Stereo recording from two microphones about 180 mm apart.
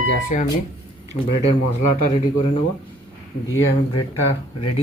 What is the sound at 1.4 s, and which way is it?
Speech, 40° left (ahead or behind).